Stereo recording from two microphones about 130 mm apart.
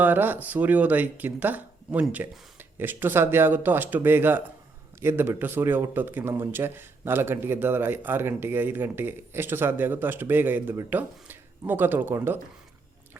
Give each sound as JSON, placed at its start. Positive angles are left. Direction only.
{"t": 0.0, "sound": "speech", "side_deg": -15}